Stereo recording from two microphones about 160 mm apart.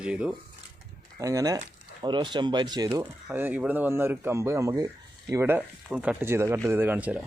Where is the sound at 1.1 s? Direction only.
20° right (ahead or behind).